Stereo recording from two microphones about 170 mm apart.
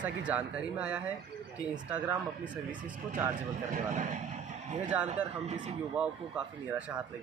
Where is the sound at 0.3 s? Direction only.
10° right (ahead or behind).